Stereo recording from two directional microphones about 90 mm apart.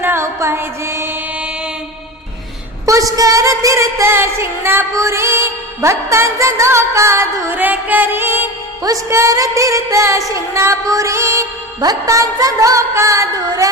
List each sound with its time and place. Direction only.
0.0 s music: 30° right (ahead or behind)
2.8 s music: 40° right (ahead or behind)
7.5 s music: 20° right (ahead or behind)
8.8 s music: 35° right (ahead or behind)